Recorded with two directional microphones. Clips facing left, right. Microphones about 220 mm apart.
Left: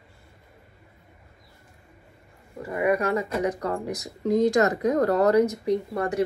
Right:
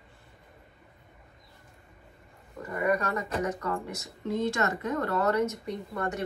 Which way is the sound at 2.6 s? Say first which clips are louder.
Left 4 dB; 30° left (ahead or behind).